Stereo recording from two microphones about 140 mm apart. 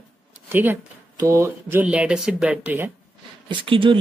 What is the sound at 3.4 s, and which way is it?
Speech, 40° right (ahead or behind).